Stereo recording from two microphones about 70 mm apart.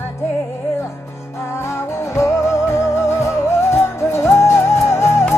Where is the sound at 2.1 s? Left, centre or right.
Left.